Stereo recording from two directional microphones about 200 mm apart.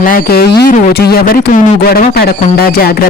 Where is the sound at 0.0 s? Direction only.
45° left (ahead or behind).